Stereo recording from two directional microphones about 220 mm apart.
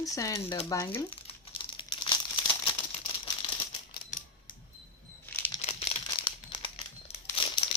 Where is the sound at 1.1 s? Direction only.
25° left (ahead or behind).